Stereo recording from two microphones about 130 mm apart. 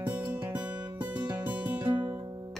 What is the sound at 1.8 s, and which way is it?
Music, 35° right (ahead or behind).